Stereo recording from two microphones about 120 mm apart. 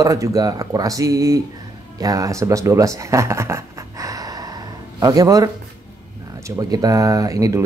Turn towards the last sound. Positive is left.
turn(degrees=-30)  # may be behind; listen again after turning